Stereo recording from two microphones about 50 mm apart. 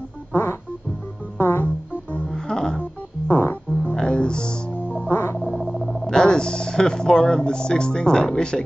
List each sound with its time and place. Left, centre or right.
0.3 s music: left
2.2 s music: centre
3.3 s music: left
3.9 s music: centre
5.1 s frog: left
5.6 s a sound: centre
6.0 s speech: centre